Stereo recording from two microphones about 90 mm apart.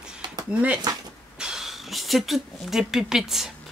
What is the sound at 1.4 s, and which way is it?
Speech, 5° right (ahead or behind).